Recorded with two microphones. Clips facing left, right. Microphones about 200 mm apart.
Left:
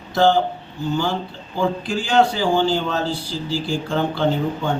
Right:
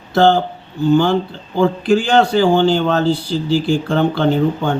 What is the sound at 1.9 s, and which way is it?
A man's voice, 60° right (ahead or behind).